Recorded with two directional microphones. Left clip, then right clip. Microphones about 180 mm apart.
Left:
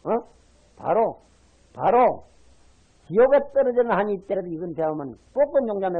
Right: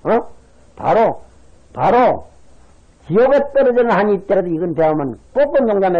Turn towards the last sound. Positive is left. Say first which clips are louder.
# right 8 dB
turn(degrees=-25)  # may be behind; listen again after turning